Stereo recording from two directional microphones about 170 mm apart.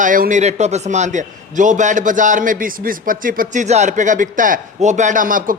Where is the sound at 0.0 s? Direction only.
50° right (ahead or behind).